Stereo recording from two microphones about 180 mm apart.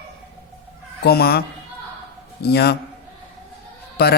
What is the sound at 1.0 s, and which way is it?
Speech, 60° left (ahead or behind).